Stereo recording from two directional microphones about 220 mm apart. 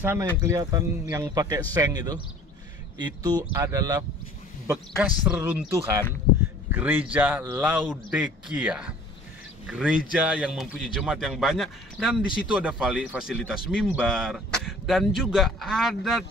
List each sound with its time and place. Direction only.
0.0 s a man's voice: 10° right (ahead or behind)